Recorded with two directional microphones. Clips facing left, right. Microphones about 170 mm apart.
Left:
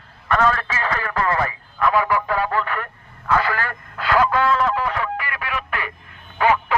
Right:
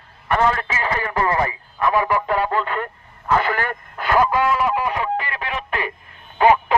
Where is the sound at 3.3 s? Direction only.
20° right (ahead or behind).